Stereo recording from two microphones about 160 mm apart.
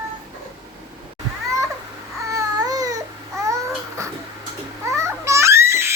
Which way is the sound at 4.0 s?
20° right (ahead or behind).